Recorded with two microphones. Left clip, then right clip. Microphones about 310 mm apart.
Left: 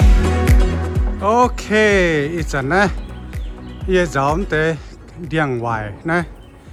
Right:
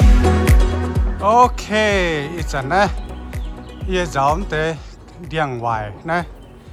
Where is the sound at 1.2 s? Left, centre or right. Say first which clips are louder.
Right 2 dB; centre.